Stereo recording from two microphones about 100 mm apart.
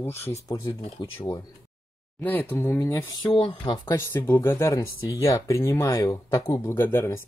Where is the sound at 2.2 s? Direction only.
20° left (ahead or behind).